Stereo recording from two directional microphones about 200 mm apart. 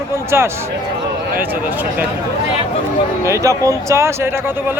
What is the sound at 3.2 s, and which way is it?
Speech, 15° right (ahead or behind).